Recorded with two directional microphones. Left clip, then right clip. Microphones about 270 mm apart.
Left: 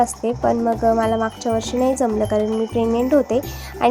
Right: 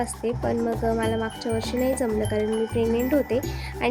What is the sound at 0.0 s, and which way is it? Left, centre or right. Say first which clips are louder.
Speech: left 8 dB; centre.